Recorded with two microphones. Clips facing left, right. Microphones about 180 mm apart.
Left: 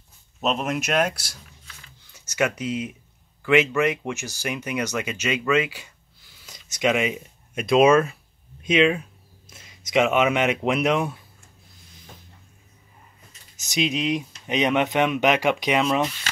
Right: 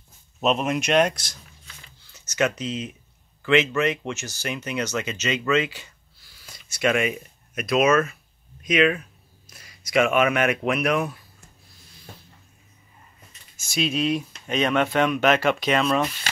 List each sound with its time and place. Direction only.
0.4 s speech: centre (ahead or behind); by 11.1 s 25° left (ahead or behind)
13.6 s speech: 20° left (ahead or behind)